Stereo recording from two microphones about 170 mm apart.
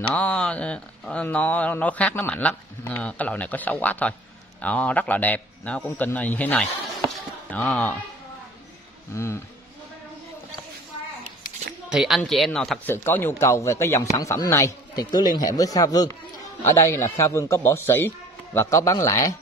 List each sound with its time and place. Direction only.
0.1 s speech: 5° left (ahead or behind)
9.1 s speech: 15° left (ahead or behind)
11.9 s speech: centre (ahead or behind); by 19.3 s 20° left (ahead or behind)